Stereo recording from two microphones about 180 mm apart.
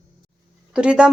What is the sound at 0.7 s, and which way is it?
Speech, 5° right (ahead or behind).